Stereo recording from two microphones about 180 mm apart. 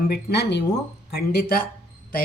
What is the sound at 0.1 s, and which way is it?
Speech, 65° left (ahead or behind).